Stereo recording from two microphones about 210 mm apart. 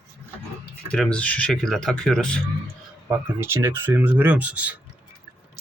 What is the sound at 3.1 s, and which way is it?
Speech, 10° right (ahead or behind).